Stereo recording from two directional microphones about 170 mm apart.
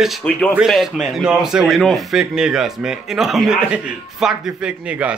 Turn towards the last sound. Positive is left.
turn(degrees=-5)  # may be behind; listen again after turning